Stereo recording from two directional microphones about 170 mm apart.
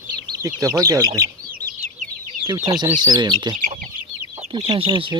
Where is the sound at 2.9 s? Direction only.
25° right (ahead or behind).